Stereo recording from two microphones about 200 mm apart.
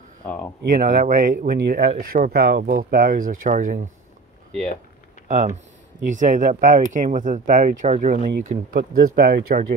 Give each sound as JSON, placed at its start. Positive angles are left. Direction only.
{"t": 0.7, "sound": "speech", "side_deg": -40}
{"t": 5.3, "sound": "speech", "side_deg": -40}